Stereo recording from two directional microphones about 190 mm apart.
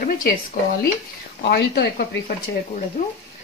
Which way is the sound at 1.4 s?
55° left (ahead or behind).